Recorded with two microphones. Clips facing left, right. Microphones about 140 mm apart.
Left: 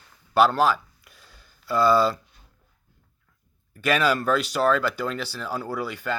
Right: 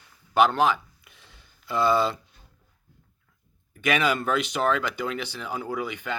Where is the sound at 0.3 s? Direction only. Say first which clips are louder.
Left 1 dB; 20° right (ahead or behind).